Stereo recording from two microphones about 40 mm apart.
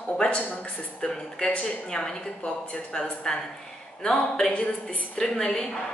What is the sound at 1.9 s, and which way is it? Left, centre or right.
A woman's voice, centre.